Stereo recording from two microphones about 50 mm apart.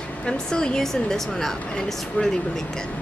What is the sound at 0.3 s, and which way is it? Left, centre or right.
A woman's voice, centre.